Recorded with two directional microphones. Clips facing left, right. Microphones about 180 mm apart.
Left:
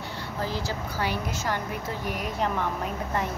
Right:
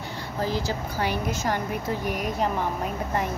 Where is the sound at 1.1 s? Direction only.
15° right (ahead or behind).